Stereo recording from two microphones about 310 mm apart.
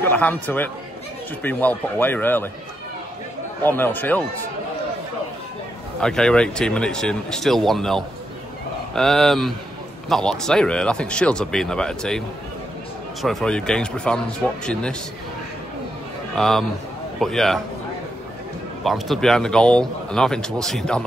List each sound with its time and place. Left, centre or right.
0.0 s speech: centre
3.6 s speech: centre
5.9 s speech: centre
13.2 s speech: centre
16.3 s speech: centre
18.9 s speech: centre